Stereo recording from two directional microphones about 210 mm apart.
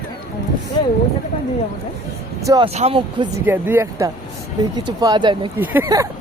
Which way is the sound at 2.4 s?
15° right (ahead or behind).